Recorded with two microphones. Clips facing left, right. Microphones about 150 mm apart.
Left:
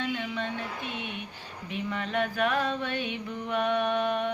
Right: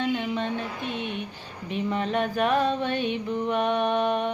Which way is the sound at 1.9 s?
25° right (ahead or behind).